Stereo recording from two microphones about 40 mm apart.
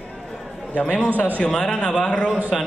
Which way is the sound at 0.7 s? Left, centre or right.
Left.